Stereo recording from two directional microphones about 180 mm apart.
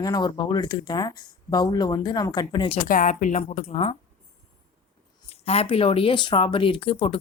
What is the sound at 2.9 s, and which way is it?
A woman's voice, 45° left (ahead or behind).